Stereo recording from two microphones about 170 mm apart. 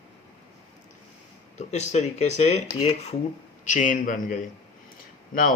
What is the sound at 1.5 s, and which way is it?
Speech, 40° left (ahead or behind).